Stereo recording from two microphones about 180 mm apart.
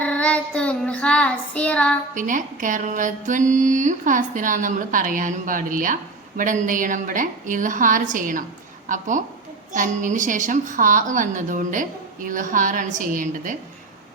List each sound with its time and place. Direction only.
0.0 s child singing: 5° left (ahead or behind)
2.1 s speech: 45° right (ahead or behind)